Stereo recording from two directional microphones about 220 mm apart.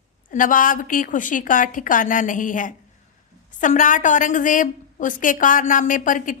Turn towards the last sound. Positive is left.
turn(degrees=35)  # may be behind; listen again after turning